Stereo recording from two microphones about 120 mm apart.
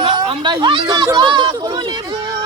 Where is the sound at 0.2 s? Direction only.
40° right (ahead or behind).